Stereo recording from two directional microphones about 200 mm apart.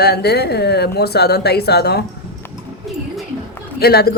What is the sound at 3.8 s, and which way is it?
Speech, 50° left (ahead or behind).